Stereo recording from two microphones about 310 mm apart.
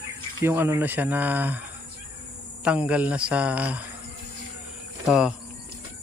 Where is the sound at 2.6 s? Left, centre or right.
Centre.